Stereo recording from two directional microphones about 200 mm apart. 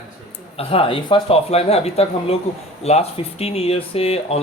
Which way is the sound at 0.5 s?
25° left (ahead or behind).